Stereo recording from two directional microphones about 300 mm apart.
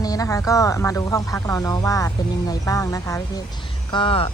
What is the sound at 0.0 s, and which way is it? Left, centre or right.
Speech, centre.